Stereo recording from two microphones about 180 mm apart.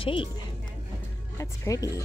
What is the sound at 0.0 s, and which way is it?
Speech, 30° left (ahead or behind).